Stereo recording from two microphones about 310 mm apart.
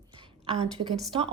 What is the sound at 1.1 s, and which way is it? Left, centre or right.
Speech, centre.